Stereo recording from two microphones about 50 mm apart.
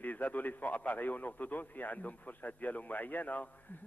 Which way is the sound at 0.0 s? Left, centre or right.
Left.